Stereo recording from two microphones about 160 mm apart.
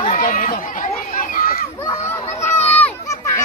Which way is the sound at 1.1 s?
60° left (ahead or behind).